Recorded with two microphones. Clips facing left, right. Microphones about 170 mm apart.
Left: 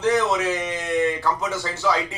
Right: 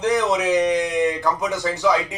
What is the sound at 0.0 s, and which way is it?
Speech, 15° right (ahead or behind).